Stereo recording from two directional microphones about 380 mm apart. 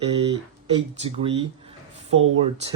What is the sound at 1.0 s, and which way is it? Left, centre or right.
Speech, centre.